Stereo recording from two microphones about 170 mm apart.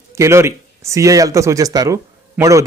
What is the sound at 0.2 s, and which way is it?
Speech, 15° right (ahead or behind).